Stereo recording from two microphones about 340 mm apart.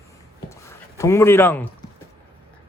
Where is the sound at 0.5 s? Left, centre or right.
Centre.